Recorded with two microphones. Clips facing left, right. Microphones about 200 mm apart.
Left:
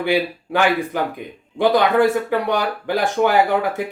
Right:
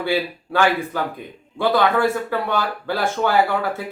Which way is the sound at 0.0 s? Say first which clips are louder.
Left 3 dB; 15° left (ahead or behind).